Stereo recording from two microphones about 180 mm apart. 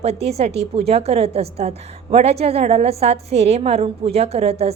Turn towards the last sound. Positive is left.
turn(degrees=-35)  # may be behind; listen again after turning